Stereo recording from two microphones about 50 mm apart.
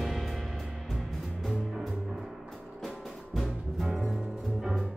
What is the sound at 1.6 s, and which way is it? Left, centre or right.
Music, centre.